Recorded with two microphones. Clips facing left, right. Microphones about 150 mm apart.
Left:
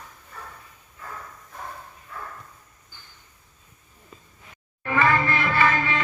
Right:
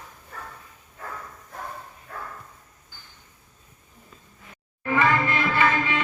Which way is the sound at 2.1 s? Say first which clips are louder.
Right 1 dB; 70° right (ahead or behind).